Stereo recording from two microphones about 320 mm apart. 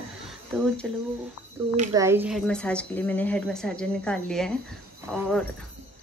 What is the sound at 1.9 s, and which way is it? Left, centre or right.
Speech, centre.